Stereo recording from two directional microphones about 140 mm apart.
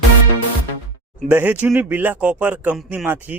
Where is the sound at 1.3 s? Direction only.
15° right (ahead or behind).